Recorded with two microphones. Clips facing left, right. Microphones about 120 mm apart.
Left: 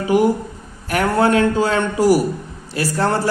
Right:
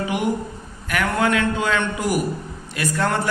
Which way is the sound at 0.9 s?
35° left (ahead or behind).